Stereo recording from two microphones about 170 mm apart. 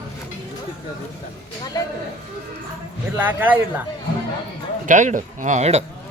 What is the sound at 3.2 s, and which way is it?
Speech, 10° right (ahead or behind).